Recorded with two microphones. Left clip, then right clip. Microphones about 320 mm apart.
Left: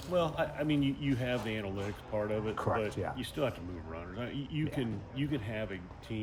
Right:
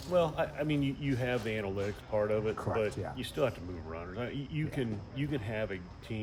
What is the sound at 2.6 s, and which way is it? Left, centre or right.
Speech, left.